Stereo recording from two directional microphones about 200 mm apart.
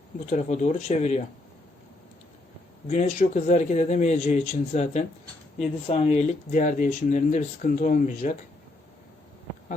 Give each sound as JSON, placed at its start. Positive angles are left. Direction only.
{"t": 0.3, "sound": "speech", "side_deg": 40}
{"t": 2.9, "sound": "speech", "side_deg": 35}